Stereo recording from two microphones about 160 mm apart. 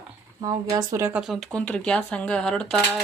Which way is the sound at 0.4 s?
20° right (ahead or behind).